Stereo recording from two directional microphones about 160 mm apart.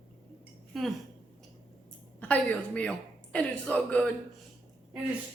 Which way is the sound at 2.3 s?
10° left (ahead or behind).